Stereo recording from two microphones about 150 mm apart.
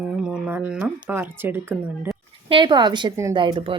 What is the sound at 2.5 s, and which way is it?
A woman's voice, 30° right (ahead or behind).